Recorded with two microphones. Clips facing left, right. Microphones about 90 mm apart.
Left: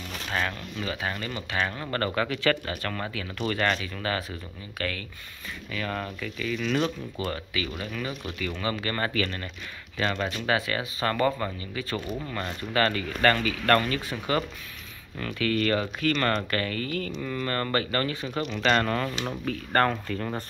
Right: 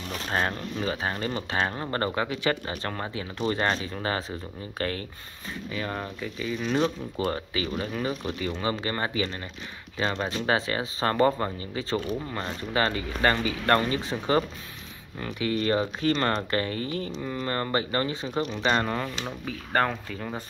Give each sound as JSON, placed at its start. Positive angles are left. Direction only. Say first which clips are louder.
{"t": 0.3, "sound": "speech", "louder": "right 2 dB", "side_deg": -35}